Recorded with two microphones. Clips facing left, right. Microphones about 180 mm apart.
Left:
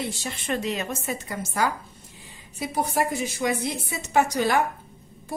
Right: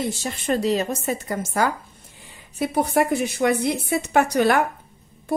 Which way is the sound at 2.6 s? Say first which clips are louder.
Right 5 dB; 60° right (ahead or behind).